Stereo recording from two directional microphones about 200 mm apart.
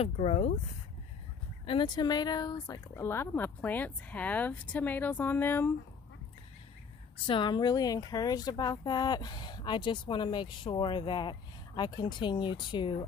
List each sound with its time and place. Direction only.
0.0 s speech: 30° left (ahead or behind)
1.7 s speech: 20° left (ahead or behind)
7.2 s speech: 25° left (ahead or behind)